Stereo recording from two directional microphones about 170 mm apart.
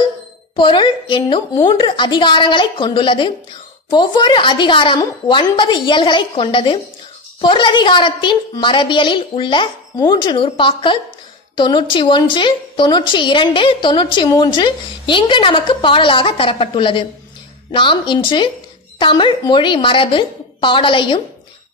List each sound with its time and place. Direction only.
0.6 s a woman's voice: 30° left (ahead or behind)